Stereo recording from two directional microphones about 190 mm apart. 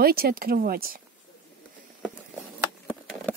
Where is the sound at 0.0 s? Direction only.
55° right (ahead or behind).